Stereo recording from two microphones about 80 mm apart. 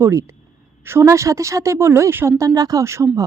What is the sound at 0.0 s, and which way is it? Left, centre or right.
Speech, right.